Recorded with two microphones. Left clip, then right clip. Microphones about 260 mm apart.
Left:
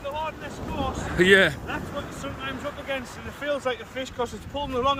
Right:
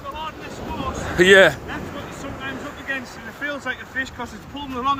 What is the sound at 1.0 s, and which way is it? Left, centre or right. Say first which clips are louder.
Speech: right 6 dB; centre.